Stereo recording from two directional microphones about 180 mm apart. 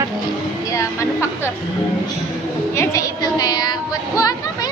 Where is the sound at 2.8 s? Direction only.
20° left (ahead or behind).